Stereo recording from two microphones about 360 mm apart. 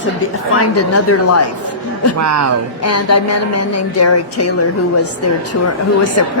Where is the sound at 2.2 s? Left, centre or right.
Right.